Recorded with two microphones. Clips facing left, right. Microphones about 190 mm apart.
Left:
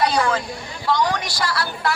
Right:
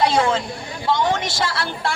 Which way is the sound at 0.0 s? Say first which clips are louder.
Right 2 dB; 25° right (ahead or behind).